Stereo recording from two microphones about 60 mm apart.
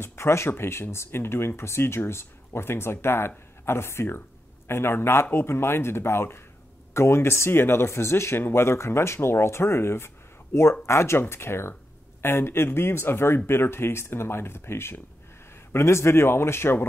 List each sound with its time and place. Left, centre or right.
0.0 s speech: left